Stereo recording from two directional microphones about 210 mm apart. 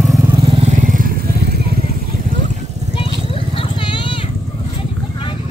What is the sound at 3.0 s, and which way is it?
Horse, 25° left (ahead or behind).